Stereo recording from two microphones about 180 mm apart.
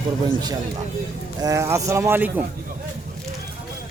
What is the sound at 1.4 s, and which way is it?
Speech, 15° right (ahead or behind).